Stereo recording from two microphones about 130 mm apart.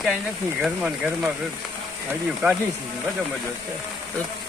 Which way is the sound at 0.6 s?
5° right (ahead or behind).